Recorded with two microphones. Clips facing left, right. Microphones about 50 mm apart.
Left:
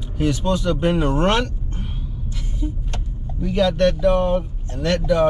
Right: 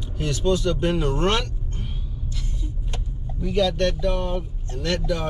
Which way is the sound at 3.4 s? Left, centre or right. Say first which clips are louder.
Left 4 dB; centre.